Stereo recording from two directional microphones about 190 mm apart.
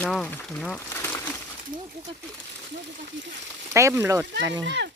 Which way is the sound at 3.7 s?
15° right (ahead or behind).